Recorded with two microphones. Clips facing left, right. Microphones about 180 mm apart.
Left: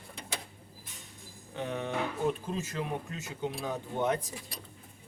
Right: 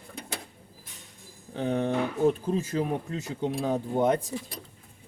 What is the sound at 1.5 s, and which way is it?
Speech, 35° right (ahead or behind).